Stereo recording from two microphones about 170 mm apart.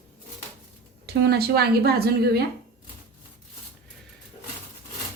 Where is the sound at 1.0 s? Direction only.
70° right (ahead or behind).